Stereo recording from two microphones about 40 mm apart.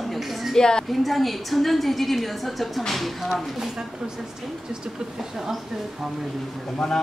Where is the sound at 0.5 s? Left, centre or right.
Centre.